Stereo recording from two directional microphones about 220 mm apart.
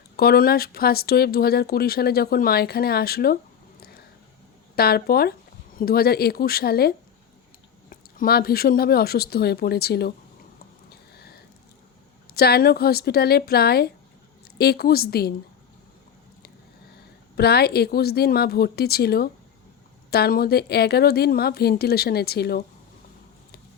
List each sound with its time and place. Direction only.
0.2 s speech: 45° left (ahead or behind)
4.7 s speech: 45° left (ahead or behind)
12.3 s speech: 45° left (ahead or behind)
17.3 s speech: 45° left (ahead or behind)